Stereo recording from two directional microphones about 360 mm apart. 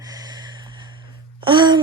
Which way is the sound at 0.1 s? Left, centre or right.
Centre.